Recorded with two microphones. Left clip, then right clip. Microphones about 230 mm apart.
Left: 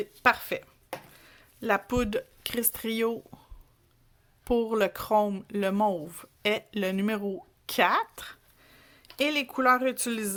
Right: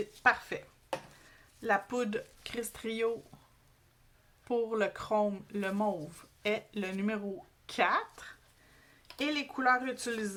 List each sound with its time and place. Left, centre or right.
0.2 s speech: left
4.4 s speech: left